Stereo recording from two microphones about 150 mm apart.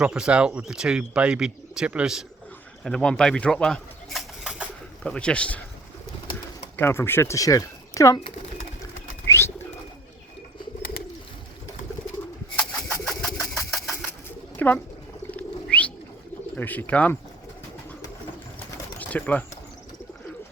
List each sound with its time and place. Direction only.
0.0 s speech: 5° right (ahead or behind)
5.0 s speech: 5° left (ahead or behind)
6.7 s speech: 15° left (ahead or behind)
8.8 s bird: 20° left (ahead or behind)
12.5 s engine: 5° left (ahead or behind)
14.5 s bird: 10° left (ahead or behind)
16.6 s speech: 10° left (ahead or behind)
18.9 s speech: 10° left (ahead or behind)